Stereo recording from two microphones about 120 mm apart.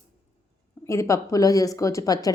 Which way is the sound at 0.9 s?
25° left (ahead or behind).